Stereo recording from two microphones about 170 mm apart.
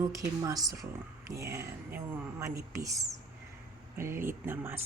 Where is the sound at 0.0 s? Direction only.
20° right (ahead or behind).